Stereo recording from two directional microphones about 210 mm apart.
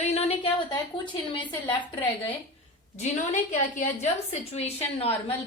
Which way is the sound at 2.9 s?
30° left (ahead or behind).